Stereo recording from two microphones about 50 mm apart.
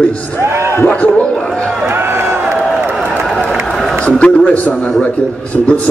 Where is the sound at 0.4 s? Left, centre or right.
Right.